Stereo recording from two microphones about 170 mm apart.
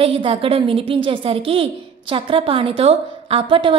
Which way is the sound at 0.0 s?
35° right (ahead or behind).